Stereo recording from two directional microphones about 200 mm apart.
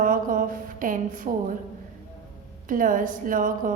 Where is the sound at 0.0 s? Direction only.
45° right (ahead or behind).